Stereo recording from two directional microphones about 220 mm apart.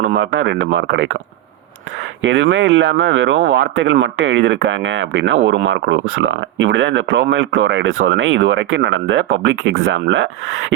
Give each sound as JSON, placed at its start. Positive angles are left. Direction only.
{"t": 0.3, "sound": "speech", "side_deg": -60}
{"t": 2.2, "sound": "speech", "side_deg": -60}